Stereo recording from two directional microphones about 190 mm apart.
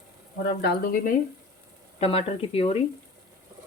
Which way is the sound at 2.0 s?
30° left (ahead or behind).